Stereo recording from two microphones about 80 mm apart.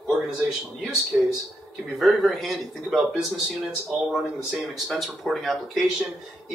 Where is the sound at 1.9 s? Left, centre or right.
Centre.